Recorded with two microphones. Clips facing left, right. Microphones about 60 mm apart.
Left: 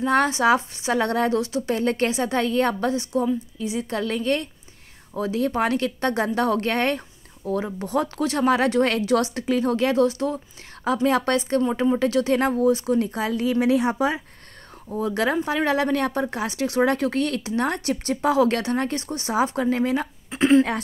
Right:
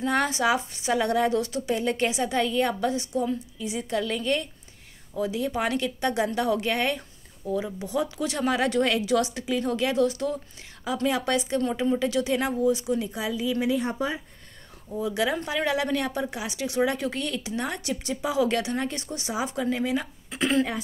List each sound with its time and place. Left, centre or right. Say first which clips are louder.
0.0 s a woman's voice: left 5 dB; left
3.6 s a woman's voice: left 1 dB; left
15.0 s a woman's voice: left 4 dB; left